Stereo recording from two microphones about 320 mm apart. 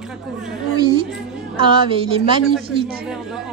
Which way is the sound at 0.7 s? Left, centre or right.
Centre.